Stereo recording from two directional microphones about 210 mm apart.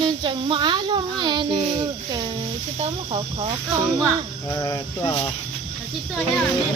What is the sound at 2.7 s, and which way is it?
Speech, 30° right (ahead or behind).